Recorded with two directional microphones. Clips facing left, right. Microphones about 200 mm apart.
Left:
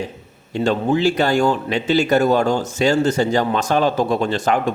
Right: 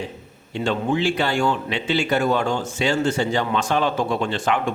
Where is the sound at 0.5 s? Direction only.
40° left (ahead or behind).